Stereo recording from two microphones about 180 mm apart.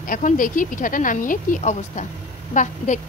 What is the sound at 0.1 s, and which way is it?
A woman's voice, 45° left (ahead or behind).